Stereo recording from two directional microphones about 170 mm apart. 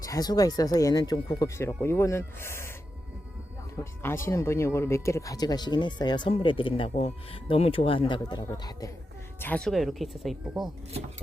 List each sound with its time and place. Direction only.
0.0 s speech: 20° left (ahead or behind)
4.0 s speech: 15° left (ahead or behind)
9.4 s speech: 5° left (ahead or behind)